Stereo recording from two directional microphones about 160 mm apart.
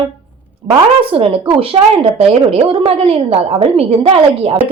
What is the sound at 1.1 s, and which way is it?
A woman's voice, 35° right (ahead or behind).